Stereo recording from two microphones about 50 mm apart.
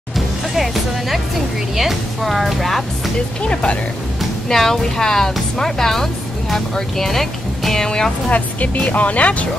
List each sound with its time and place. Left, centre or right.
0.6 s music: centre
1.8 s a woman's voice: centre
4.2 s speech: centre
8.3 s speech: left